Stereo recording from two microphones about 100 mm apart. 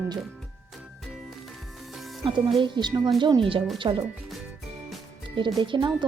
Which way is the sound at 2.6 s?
50° right (ahead or behind).